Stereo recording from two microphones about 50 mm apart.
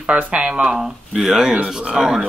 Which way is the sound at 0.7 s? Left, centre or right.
Centre.